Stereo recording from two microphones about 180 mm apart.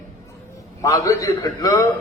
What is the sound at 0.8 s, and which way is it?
A man's voice, 20° left (ahead or behind).